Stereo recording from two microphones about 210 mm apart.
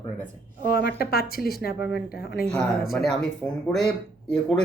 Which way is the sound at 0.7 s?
45° left (ahead or behind).